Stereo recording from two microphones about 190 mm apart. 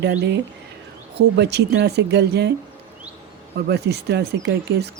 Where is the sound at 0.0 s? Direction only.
65° right (ahead or behind).